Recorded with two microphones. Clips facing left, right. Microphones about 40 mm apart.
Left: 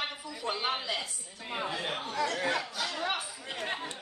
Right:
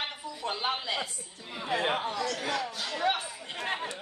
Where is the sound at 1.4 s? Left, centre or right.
Left.